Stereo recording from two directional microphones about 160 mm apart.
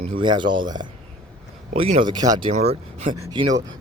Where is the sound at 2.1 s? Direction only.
25° right (ahead or behind).